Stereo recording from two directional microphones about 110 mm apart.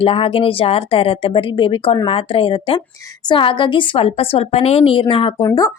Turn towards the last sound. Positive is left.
turn(degrees=30)  # may be behind; listen again after turning